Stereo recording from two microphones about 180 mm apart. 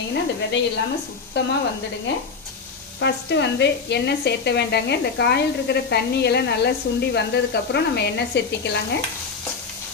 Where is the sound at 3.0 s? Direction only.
70° left (ahead or behind).